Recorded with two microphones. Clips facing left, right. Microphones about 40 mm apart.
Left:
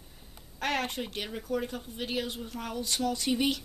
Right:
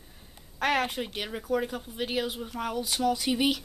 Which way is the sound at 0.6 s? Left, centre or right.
Centre.